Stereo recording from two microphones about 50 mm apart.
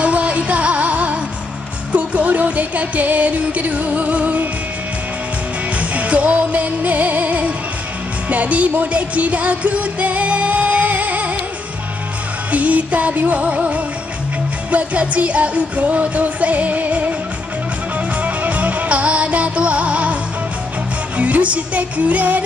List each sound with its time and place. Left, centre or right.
0.0 s music: right
5.8 s music: right
12.4 s music: right
18.2 s music: right
21.2 s music: right